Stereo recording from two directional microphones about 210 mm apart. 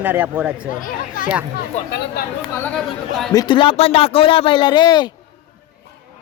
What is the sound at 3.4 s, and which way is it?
Speech, 20° left (ahead or behind).